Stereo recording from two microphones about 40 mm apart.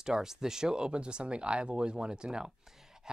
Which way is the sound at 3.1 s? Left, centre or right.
Centre.